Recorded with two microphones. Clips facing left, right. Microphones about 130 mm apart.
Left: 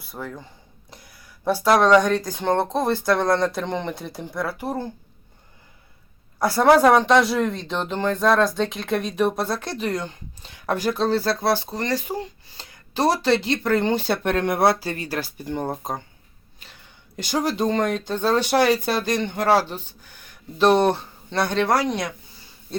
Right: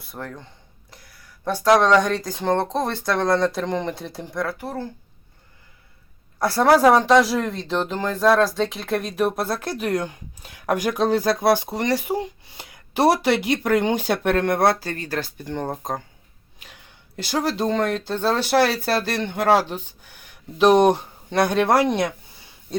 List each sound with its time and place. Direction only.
0.0 s speech: centre (ahead or behind)
1.5 s speech: 5° left (ahead or behind)
4.5 s speech: 15° left (ahead or behind)
6.4 s speech: centre (ahead or behind)
16.6 s speech: 10° right (ahead or behind)